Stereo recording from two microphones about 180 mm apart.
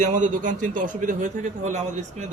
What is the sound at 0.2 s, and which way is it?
A man's voice, 45° right (ahead or behind).